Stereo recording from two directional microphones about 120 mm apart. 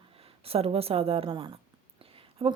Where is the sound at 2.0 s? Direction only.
50° right (ahead or behind).